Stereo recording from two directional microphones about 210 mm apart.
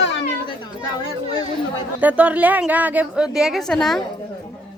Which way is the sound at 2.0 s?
5° right (ahead or behind).